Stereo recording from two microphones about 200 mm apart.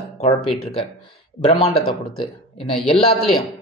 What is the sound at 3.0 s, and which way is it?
Speech, 25° left (ahead or behind).